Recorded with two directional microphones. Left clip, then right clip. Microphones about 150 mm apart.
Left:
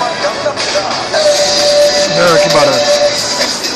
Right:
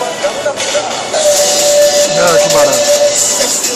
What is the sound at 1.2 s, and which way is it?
Music, 20° right (ahead or behind).